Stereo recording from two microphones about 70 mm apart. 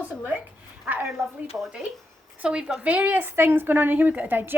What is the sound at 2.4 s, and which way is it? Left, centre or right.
Speech, centre.